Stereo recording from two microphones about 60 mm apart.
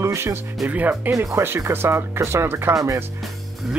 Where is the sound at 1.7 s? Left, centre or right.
Right.